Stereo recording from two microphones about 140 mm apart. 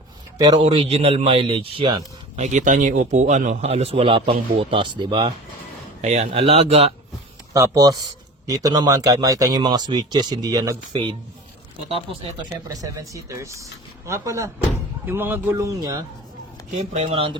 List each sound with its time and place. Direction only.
0.3 s speech: 30° right (ahead or behind)
2.3 s a man's voice: 55° right (ahead or behind); by 5.3 s 35° right (ahead or behind)
6.0 s speech: 55° right (ahead or behind)
7.5 s speech: 25° right (ahead or behind)
12.6 s speech: 25° right (ahead or behind)
16.7 s speech: 50° right (ahead or behind)